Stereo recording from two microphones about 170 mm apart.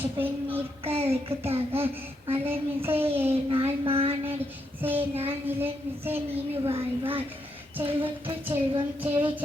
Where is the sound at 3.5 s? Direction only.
35° right (ahead or behind).